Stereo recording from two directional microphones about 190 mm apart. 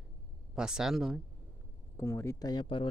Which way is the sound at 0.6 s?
5° right (ahead or behind).